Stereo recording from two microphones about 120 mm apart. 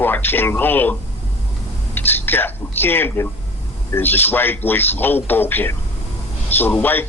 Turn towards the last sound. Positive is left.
turn(degrees=15)  # may be behind; listen again after turning